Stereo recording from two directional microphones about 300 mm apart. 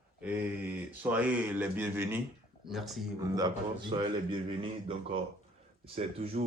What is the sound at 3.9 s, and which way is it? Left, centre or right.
Speech, centre.